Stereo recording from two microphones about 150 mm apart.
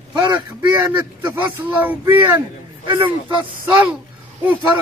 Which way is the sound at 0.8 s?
15° right (ahead or behind).